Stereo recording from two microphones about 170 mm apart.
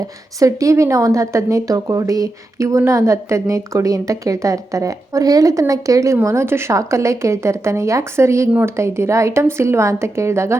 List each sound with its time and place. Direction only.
0.3 s speech: 20° right (ahead or behind)